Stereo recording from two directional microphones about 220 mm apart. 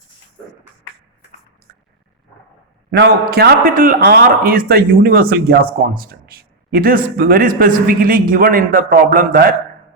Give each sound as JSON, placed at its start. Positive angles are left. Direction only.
{"t": 2.9, "sound": "a man's voice", "side_deg": -45}